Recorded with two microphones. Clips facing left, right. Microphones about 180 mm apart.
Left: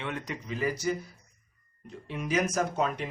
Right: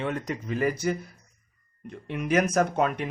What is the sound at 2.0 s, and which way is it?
Speech, 60° right (ahead or behind).